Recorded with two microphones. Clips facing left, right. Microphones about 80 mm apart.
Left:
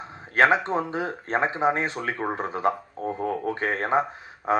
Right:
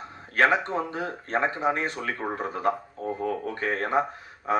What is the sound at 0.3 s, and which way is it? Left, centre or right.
Speech, left.